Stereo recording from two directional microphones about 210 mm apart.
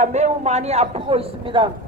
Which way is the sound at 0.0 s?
35° right (ahead or behind).